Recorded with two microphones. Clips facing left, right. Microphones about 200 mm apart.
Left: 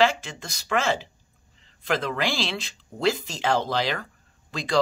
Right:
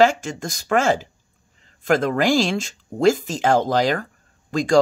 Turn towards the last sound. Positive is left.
turn(degrees=-45)  # may be behind; listen again after turning